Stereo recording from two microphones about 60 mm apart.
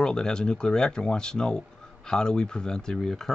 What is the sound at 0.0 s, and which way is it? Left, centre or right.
Speech, centre.